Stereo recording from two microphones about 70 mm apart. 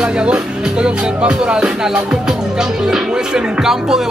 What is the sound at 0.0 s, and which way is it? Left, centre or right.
Music, centre.